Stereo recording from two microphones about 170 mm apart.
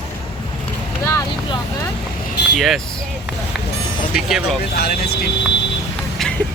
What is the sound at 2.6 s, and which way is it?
Speech, centre (ahead or behind).